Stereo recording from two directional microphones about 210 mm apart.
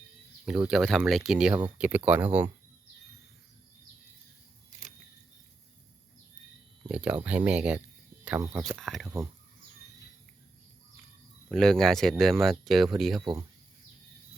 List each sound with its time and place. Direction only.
0.4 s speech: 5° right (ahead or behind)
6.8 s speech: 5° right (ahead or behind)
11.4 s speech: centre (ahead or behind)
13.1 s speech: 25° right (ahead or behind)